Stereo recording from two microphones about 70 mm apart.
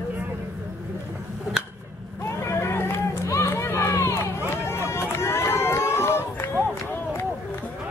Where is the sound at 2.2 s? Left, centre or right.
Left.